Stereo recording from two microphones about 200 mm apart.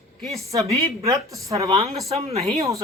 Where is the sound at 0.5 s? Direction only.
15° right (ahead or behind).